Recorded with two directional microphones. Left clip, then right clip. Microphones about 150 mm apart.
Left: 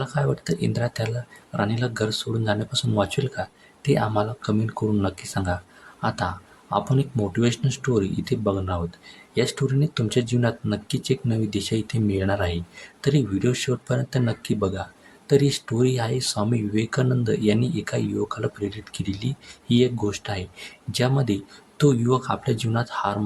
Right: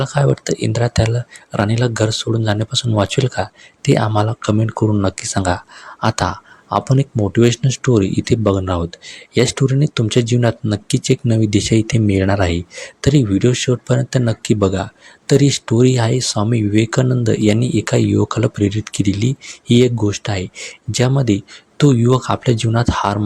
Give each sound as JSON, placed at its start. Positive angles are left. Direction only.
{"t": 0.0, "sound": "speech", "side_deg": -35}